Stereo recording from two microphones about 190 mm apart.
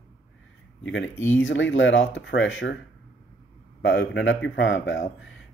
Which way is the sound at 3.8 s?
70° left (ahead or behind).